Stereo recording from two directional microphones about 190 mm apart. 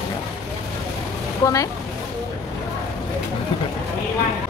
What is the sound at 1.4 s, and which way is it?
Speech, 15° left (ahead or behind).